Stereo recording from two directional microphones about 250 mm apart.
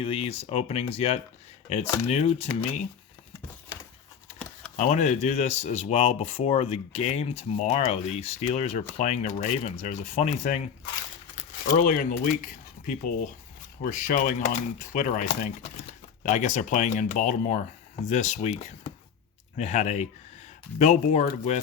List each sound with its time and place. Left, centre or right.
0.0 s speech: left
4.8 s speech: left